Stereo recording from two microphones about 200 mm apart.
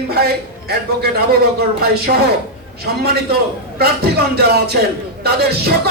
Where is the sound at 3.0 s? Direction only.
55° right (ahead or behind).